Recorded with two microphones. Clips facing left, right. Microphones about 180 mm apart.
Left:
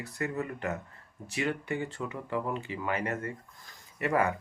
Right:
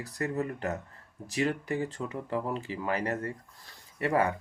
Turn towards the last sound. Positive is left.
turn(degrees=-30)  # may be behind; listen again after turning